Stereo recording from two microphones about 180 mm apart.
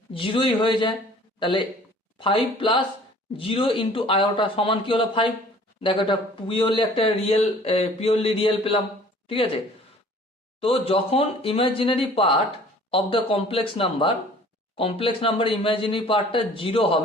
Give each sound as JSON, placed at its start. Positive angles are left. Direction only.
{"t": 0.1, "sound": "a man's voice", "side_deg": 30}
{"t": 10.6, "sound": "a man's voice", "side_deg": 30}